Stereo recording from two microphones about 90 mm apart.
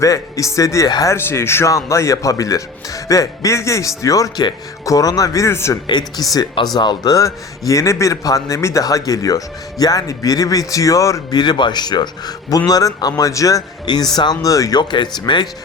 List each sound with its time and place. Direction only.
0.0 s speech: 40° left (ahead or behind)
0.9 s a man's voice: 50° left (ahead or behind)
1.1 s speech: 30° left (ahead or behind)
5.9 s a man's voice: 50° left (ahead or behind)
11.3 s a man's voice: 55° left (ahead or behind); by 13.7 s 40° left (ahead or behind)
13.8 s a man's voice: 50° left (ahead or behind)
14.8 s speech: 55° left (ahead or behind)